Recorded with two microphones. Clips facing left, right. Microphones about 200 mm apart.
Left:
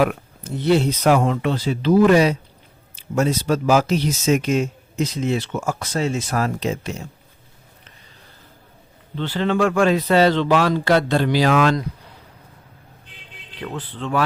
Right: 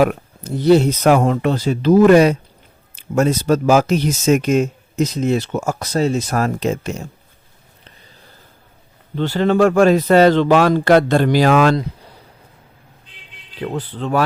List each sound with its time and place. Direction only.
0.0 s speech: 40° right (ahead or behind)
9.1 s speech: 45° right (ahead or behind)
13.6 s speech: 40° right (ahead or behind)